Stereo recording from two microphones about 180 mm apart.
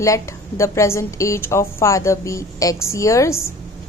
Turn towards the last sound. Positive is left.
turn(degrees=15)  # may be behind; listen again after turning